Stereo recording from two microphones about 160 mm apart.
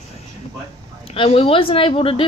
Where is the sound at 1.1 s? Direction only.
35° left (ahead or behind).